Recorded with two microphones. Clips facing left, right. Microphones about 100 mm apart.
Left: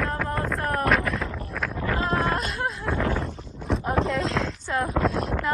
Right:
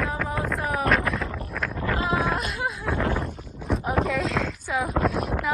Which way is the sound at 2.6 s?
15° right (ahead or behind).